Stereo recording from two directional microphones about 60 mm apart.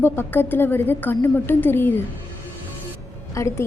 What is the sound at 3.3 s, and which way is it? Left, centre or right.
Speech, left.